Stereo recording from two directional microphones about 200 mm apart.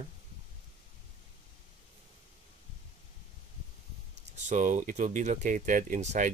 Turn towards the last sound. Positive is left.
turn(degrees=-35)  # may be behind; listen again after turning